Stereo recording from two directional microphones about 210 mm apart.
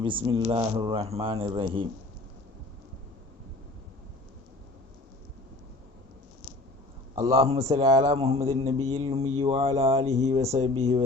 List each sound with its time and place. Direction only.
0.0 s speech: 25° right (ahead or behind)
7.2 s speech: 25° right (ahead or behind)